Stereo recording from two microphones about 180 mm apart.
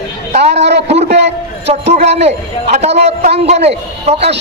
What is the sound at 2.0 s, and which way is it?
A man's voice, 35° right (ahead or behind).